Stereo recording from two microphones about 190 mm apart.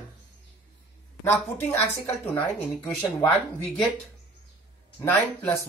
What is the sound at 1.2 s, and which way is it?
A woman's voice, 10° left (ahead or behind).